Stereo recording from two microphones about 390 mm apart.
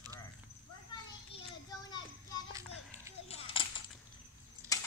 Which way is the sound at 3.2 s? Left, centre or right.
Centre.